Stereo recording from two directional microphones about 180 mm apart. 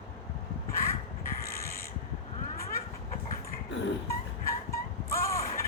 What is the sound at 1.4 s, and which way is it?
Pulleys, 55° left (ahead or behind).